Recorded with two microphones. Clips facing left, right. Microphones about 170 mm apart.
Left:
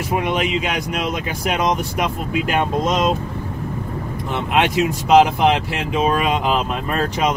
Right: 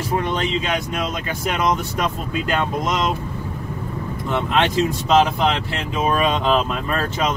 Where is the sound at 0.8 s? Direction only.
20° left (ahead or behind).